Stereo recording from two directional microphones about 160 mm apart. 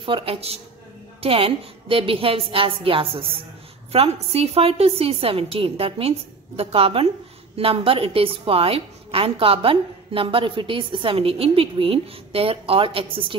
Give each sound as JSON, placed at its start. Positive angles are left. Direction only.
{"t": 0.0, "sound": "a woman's voice", "side_deg": -35}